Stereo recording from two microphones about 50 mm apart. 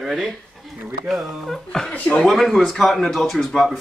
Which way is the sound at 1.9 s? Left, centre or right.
Left.